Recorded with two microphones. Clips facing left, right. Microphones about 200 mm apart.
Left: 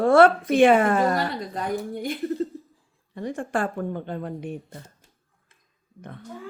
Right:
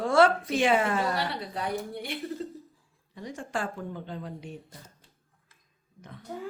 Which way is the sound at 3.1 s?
55° left (ahead or behind).